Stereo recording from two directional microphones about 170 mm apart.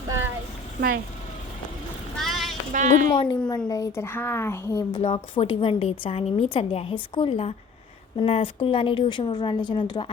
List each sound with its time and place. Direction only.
0.8 s speech: 60° right (ahead or behind)
2.1 s a sound: centre (ahead or behind)
2.7 s a woman's voice: 50° right (ahead or behind)
3.1 s a woman's voice: 25° left (ahead or behind)
4.9 s a woman's voice: 40° left (ahead or behind)